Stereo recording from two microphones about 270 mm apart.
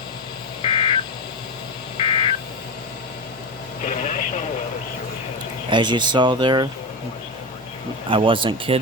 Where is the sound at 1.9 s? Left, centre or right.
Centre.